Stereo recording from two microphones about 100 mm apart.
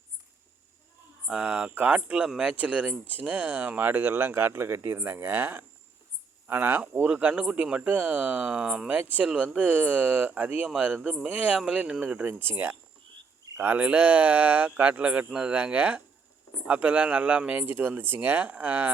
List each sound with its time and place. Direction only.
1.3 s speech: 10° right (ahead or behind)